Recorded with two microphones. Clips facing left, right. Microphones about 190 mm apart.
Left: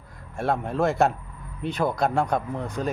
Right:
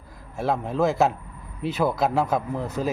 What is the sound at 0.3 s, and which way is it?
Speech, centre (ahead or behind).